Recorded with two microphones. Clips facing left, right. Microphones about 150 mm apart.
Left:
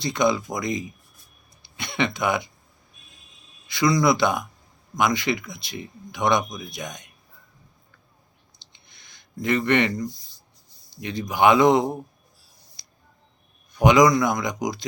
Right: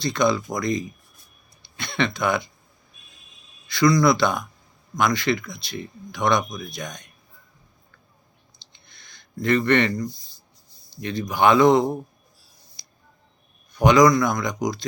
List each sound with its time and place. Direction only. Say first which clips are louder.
0.0 s speech: right 1 dB; 15° left (ahead or behind)
3.7 s speech: right 2 dB; 15° left (ahead or behind)
8.7 s a sound: right 2 dB; 15° left (ahead or behind)
11.0 s speech: even; 15° left (ahead or behind)
13.8 s speech: right 1 dB; 20° left (ahead or behind)